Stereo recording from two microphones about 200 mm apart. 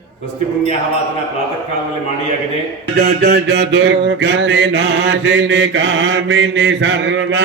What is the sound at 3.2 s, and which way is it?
Mantra, 60° right (ahead or behind).